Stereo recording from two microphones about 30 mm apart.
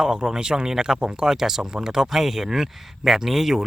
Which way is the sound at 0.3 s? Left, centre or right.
Right.